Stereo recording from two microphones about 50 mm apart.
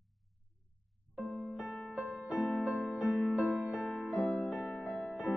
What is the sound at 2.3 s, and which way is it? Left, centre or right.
Music, centre.